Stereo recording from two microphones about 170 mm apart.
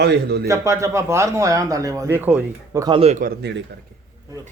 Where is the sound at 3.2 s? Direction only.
90° right.